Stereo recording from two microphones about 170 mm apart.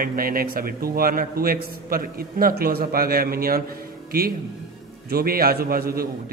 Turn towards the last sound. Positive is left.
turn(degrees=-60)  # may be behind; listen again after turning